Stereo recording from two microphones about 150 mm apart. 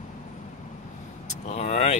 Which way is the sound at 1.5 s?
45° left (ahead or behind).